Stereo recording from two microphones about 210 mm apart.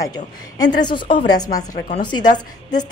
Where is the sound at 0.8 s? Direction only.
25° left (ahead or behind).